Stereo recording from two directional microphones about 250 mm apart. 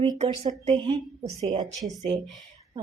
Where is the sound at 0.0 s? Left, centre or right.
Right.